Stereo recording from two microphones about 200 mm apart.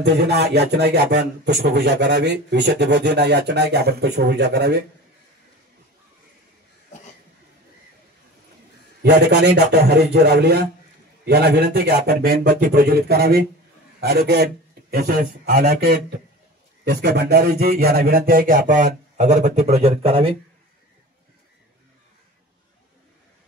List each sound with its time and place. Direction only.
0.0 s speech: 55° right (ahead or behind)
9.0 s a man's voice: 55° right (ahead or behind); by 20.3 s 25° right (ahead or behind)